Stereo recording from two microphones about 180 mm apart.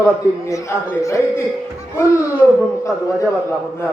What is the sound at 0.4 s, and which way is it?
Speech, 15° left (ahead or behind).